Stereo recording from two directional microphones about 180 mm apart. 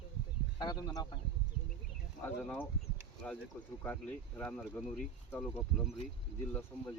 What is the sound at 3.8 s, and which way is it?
Speech, 10° left (ahead or behind).